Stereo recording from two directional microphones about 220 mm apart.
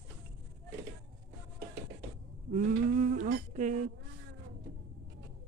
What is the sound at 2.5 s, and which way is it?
Sheep, 35° right (ahead or behind).